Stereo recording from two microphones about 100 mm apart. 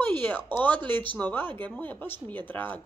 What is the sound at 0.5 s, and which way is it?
Speech, 15° left (ahead or behind).